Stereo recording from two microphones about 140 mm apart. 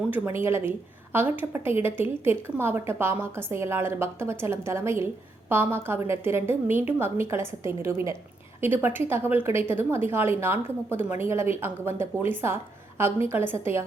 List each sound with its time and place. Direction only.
0.1 s a woman's voice: 20° right (ahead or behind)